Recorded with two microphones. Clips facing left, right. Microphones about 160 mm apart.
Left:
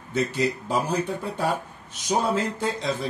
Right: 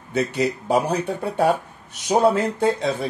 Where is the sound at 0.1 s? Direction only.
65° right (ahead or behind).